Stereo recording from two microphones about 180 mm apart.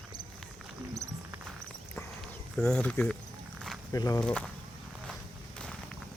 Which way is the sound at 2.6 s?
5° left (ahead or behind).